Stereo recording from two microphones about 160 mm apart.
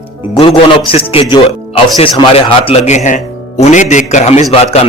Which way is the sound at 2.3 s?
40° left (ahead or behind).